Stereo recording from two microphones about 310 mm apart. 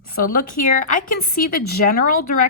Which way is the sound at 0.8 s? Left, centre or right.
Left.